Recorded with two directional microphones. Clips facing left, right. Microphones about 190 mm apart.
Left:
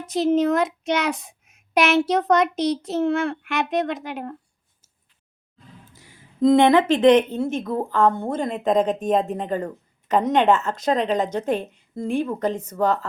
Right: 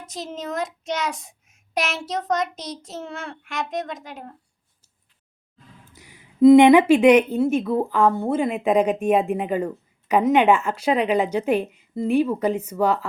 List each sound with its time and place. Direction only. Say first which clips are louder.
0.0 s a child's voice: left 13 dB; 60° left (ahead or behind)
5.9 s a woman's voice: right 1 dB; 15° right (ahead or behind)